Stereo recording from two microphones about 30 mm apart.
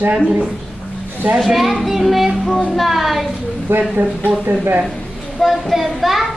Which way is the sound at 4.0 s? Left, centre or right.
Right.